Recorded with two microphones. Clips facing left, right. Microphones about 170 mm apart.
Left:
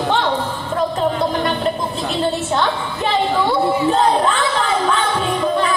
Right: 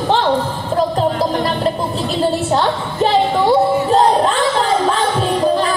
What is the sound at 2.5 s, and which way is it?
Music, 35° right (ahead or behind).